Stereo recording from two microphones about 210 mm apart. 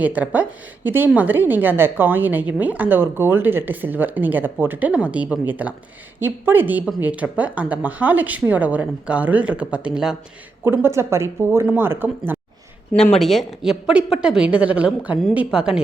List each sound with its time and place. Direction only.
0.0 s a woman's voice: 5° right (ahead or behind)
13.0 s a woman's voice: centre (ahead or behind)